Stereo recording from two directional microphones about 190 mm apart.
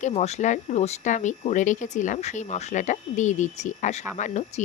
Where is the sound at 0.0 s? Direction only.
35° left (ahead or behind).